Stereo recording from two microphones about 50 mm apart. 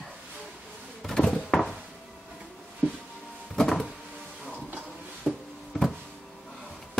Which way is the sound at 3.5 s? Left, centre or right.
Centre.